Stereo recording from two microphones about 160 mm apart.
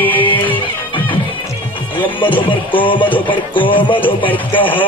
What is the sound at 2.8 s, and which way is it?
Music, 30° left (ahead or behind).